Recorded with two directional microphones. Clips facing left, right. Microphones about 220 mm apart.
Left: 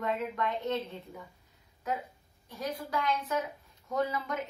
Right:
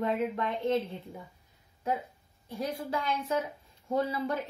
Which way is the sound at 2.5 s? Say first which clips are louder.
Right 2 dB; 30° right (ahead or behind).